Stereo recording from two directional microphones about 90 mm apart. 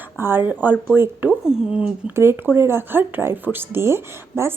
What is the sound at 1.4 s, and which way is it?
Speech, 10° right (ahead or behind).